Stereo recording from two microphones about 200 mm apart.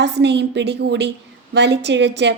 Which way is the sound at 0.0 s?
60° right (ahead or behind).